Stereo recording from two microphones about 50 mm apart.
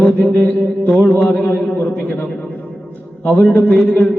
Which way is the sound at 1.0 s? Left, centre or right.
Left.